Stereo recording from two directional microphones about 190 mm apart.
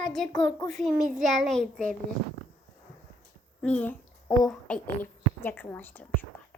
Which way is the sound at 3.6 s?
5° left (ahead or behind).